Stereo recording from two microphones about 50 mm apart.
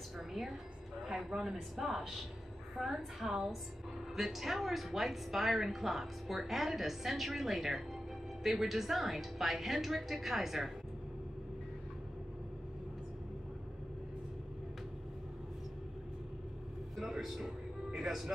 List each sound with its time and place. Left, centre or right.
1.0 s a woman's voice: centre
16.9 s speech: centre